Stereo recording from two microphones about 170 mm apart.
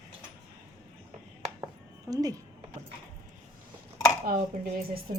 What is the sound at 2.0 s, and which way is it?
Speech, 20° right (ahead or behind).